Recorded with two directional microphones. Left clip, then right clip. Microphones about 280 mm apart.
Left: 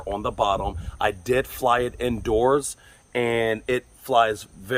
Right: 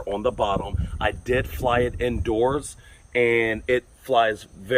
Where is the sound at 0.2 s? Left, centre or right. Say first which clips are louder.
Left 1 dB; centre.